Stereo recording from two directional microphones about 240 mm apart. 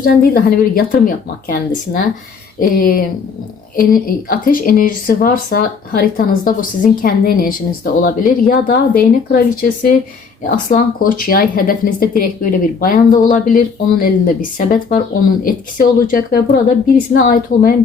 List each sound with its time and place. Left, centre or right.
0.0 s speech: left